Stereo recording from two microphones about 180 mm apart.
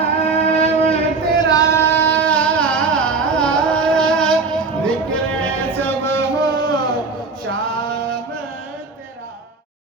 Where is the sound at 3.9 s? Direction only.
5° left (ahead or behind).